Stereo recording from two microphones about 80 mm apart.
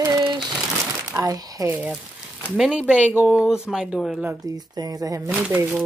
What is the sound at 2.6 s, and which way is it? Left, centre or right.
Speech, centre.